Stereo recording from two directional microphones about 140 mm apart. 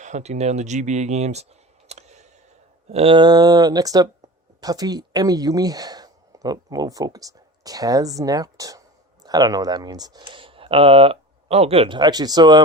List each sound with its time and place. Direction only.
0.0 s speech: 55° right (ahead or behind)
1.9 s a sound: 50° right (ahead or behind)
2.9 s speech: 40° right (ahead or behind)